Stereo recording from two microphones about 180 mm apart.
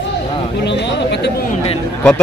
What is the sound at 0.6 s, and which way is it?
Speech, 75° left (ahead or behind).